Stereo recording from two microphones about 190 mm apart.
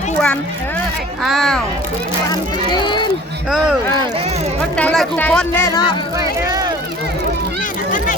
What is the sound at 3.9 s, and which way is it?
Speech, 30° right (ahead or behind).